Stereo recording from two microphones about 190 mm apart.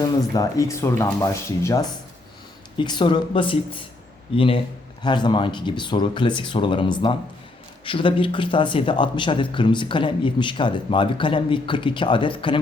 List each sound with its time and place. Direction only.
0.0 s speech: 20° left (ahead or behind)